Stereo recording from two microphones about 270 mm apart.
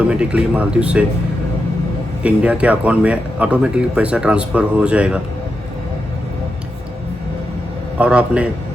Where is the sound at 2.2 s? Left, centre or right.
Centre.